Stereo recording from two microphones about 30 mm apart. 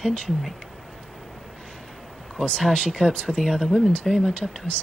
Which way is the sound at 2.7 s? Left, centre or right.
Left.